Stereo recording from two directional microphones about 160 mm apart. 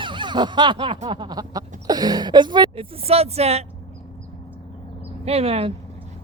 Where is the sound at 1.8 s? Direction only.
25° right (ahead or behind); by 3.6 s 40° right (ahead or behind).